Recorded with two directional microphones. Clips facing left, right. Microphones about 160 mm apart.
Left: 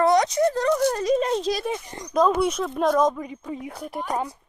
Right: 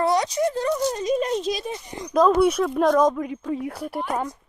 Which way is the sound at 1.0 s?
30° left (ahead or behind).